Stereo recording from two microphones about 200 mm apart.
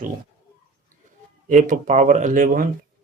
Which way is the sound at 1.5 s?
40° right (ahead or behind).